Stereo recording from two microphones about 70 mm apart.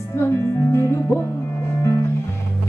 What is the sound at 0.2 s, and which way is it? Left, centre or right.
Music, left.